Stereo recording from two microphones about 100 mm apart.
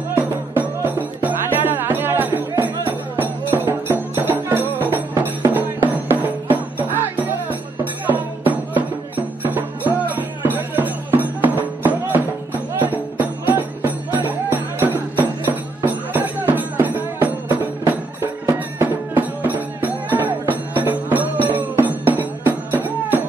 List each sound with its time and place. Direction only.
0.2 s music: 20° right (ahead or behind)